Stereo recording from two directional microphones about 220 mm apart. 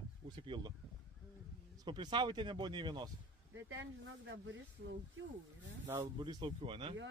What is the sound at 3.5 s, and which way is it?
Speech, 60° right (ahead or behind).